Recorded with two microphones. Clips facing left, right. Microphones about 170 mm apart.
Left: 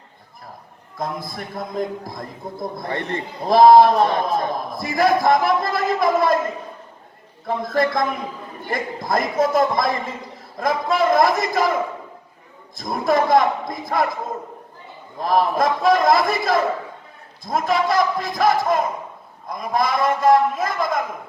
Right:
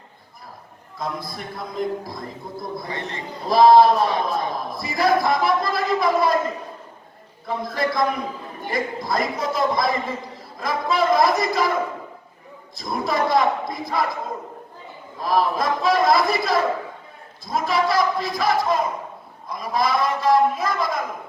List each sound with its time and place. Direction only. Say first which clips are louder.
0.9 s a man's voice: left 2 dB; 50° left (ahead or behind)
7.4 s a man's voice: left 4 dB; 50° left (ahead or behind)
12.7 s a man's voice: left 4 dB; 50° left (ahead or behind)
15.2 s a man's voice: left 3 dB; 50° left (ahead or behind)